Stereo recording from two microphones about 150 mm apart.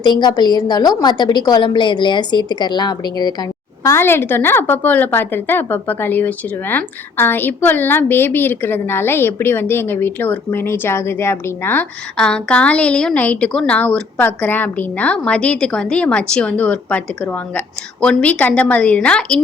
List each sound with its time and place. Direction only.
0.0 s a woman's voice: 30° left (ahead or behind)
3.9 s a woman's voice: 15° left (ahead or behind)